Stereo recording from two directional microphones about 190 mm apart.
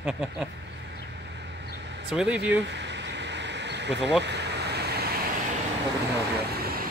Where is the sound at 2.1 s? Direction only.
5° right (ahead or behind).